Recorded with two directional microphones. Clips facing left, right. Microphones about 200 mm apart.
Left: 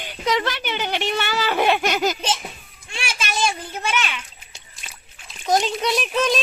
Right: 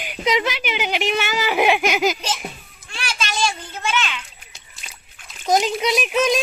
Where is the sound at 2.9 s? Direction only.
25° left (ahead or behind).